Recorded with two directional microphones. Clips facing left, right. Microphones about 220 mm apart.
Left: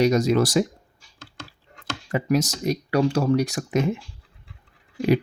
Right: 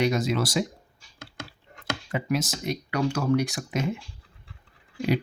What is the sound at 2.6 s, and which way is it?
Speech, 35° left (ahead or behind).